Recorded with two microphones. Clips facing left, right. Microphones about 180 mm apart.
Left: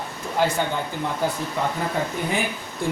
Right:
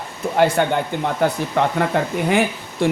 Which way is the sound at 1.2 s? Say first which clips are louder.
Right 7 dB; 70° right (ahead or behind).